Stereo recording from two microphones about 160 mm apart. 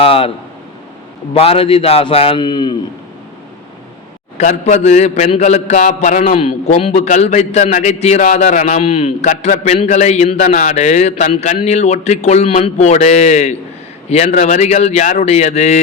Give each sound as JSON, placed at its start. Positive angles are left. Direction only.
{"t": 0.0, "sound": "a man's voice", "side_deg": 35}
{"t": 4.4, "sound": "a man's voice", "side_deg": 45}
{"t": 8.8, "sound": "a man's voice", "side_deg": 35}
{"t": 9.2, "sound": "a man's voice", "side_deg": 50}